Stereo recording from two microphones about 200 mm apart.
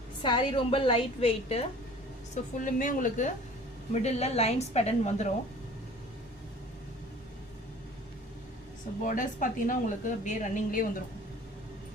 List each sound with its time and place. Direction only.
0.2 s a woman's voice: 25° left (ahead or behind)
2.3 s a woman's voice: 40° left (ahead or behind)
9.0 s a woman's voice: 40° left (ahead or behind)